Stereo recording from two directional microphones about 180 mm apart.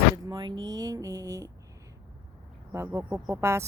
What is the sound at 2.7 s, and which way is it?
Speech, 15° right (ahead or behind).